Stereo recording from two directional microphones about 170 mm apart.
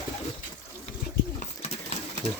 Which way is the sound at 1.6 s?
35° left (ahead or behind).